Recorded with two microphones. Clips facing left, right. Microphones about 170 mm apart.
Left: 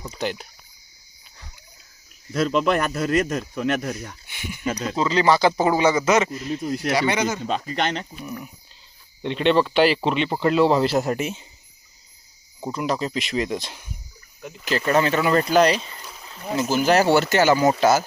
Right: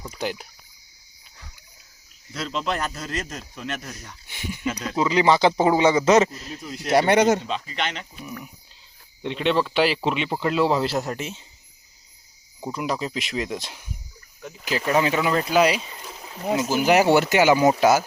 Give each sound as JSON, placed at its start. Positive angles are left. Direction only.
{"t": 0.2, "sound": "speech", "side_deg": -5}
{"t": 2.3, "sound": "speech", "side_deg": 55}
{"t": 4.3, "sound": "speech", "side_deg": -35}
{"t": 4.9, "sound": "speech", "side_deg": -15}
{"t": 6.1, "sound": "speech", "side_deg": -35}
{"t": 6.9, "sound": "speech", "side_deg": -60}
{"t": 7.4, "sound": "speech", "side_deg": 45}
{"t": 9.2, "sound": "speech", "side_deg": 0}
{"t": 12.7, "sound": "speech", "side_deg": -5}